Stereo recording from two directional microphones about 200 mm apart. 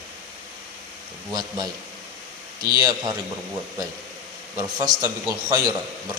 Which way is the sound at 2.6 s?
20° right (ahead or behind).